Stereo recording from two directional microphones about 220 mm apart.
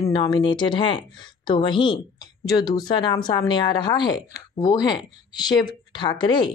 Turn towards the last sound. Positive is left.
turn(degrees=20)  # may be behind; listen again after turning